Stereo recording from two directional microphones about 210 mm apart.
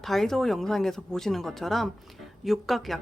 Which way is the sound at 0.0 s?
Centre (ahead or behind).